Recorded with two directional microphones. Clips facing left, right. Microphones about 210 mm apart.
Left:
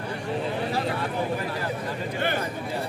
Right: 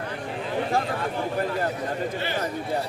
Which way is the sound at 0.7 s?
50° right (ahead or behind).